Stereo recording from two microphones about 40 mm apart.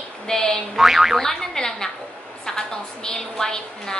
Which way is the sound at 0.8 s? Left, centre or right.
Centre.